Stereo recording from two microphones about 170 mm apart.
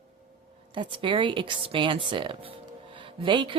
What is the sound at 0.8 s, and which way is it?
Speech, 30° right (ahead or behind).